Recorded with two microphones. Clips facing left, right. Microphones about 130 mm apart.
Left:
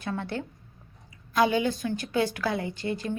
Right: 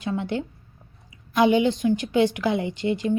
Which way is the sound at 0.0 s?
15° right (ahead or behind).